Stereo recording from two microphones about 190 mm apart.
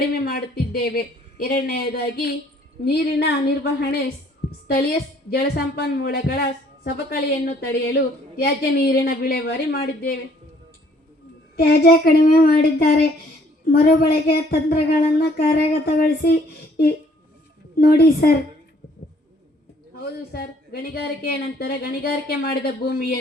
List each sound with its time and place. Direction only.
0.3 s a woman's voice: 55° left (ahead or behind)
5.3 s a woman's voice: 55° left (ahead or behind)
11.5 s speech: 55° left (ahead or behind)
20.0 s a woman's voice: 55° left (ahead or behind)